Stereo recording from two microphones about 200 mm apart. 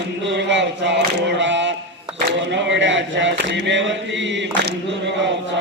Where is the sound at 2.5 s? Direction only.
65° right (ahead or behind).